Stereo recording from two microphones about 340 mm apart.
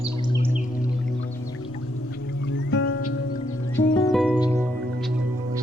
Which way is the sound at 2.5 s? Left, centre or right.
Left.